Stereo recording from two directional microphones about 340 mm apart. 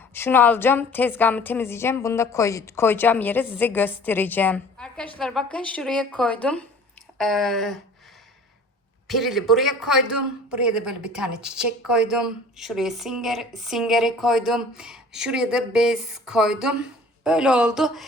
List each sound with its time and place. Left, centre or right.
0.1 s a woman's voice: centre
9.0 s a woman's voice: centre